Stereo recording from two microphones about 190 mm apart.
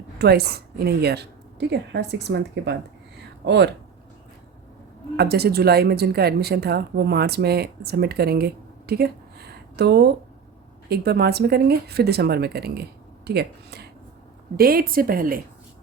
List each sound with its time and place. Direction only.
0.2 s speech: 55° right (ahead or behind)
5.1 s a woman's voice: 55° right (ahead or behind)